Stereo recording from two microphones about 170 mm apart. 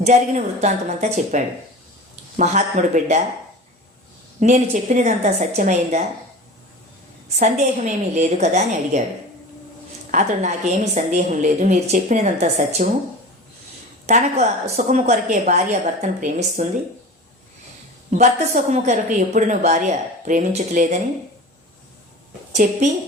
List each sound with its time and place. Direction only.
0.0 s a woman's voice: 45° right (ahead or behind)
4.4 s a woman's voice: 45° right (ahead or behind)
7.3 s a woman's voice: 45° right (ahead or behind)
10.1 s a woman's voice: 45° right (ahead or behind)
14.1 s a woman's voice: 40° right (ahead or behind)
18.1 s a woman's voice: 45° right (ahead or behind)
22.5 s a woman's voice: 45° right (ahead or behind)